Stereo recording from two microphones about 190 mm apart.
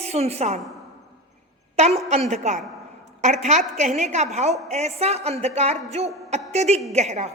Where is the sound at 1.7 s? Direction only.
35° right (ahead or behind).